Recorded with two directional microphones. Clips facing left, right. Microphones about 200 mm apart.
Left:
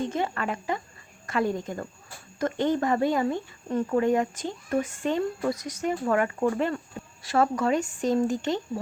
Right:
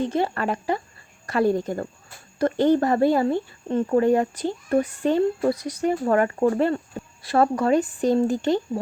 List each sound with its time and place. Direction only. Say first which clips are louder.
0.1 s speech: right 5 dB; 35° right (ahead or behind)